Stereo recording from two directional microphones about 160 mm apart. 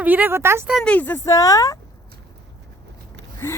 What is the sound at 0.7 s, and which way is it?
Speech, 5° left (ahead or behind).